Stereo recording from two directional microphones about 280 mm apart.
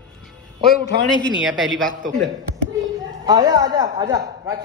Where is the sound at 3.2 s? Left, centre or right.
Centre.